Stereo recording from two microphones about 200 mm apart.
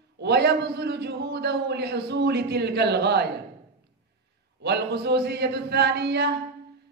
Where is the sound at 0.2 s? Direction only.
55° right (ahead or behind).